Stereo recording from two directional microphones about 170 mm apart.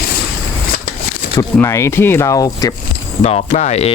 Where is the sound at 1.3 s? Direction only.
15° left (ahead or behind).